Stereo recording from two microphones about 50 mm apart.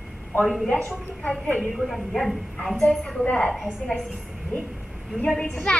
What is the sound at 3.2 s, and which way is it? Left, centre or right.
Speech, left.